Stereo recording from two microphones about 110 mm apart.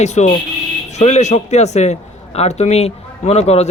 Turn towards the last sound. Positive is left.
turn(degrees=70)  # may be behind; listen again after turning